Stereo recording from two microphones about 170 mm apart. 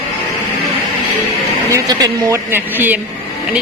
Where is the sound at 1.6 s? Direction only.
20° right (ahead or behind).